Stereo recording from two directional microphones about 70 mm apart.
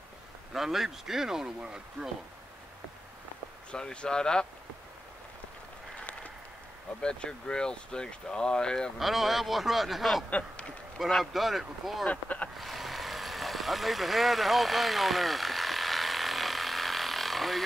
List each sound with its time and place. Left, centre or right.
0.5 s speech: centre
3.7 s speech: centre
5.9 s a sound: centre
7.0 s speech: centre
9.0 s a man's voice: centre
10.3 s a sound: centre
11.0 s a man's voice: centre
12.1 s speech: centre
12.5 s vehicle: centre